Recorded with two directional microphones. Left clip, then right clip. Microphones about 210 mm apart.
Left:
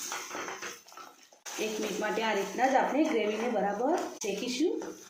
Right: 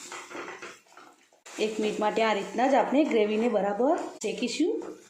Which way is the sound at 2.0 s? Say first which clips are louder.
Right 5 dB; 45° right (ahead or behind).